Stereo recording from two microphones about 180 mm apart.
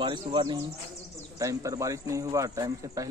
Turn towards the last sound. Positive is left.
turn(degrees=-20)  # may be behind; listen again after turning